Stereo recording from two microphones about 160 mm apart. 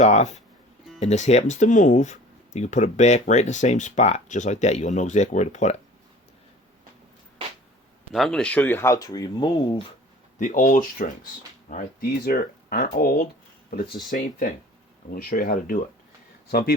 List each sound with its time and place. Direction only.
0.0 s speech: 45° left (ahead or behind)
8.1 s speech: 5° left (ahead or behind); by 9.5 s 25° left (ahead or behind)
10.3 s speech: 55° left (ahead or behind)
13.7 s speech: 75° left (ahead or behind)
14.1 s speech: 55° left (ahead or behind)
16.5 s speech: 75° left (ahead or behind)